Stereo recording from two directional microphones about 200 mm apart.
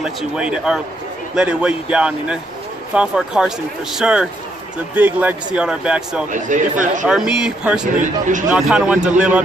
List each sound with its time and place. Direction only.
0.0 s speech: 5° right (ahead or behind)
6.3 s speech: 40° right (ahead or behind)
7.1 s speech: 5° right (ahead or behind)
7.8 s speech: 40° right (ahead or behind)
8.5 s speech: 5° right (ahead or behind)